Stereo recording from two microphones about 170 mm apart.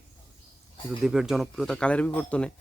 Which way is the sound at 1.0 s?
5° right (ahead or behind).